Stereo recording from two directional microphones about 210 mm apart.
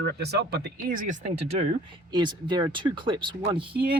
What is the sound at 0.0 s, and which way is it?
Speech, 50° right (ahead or behind).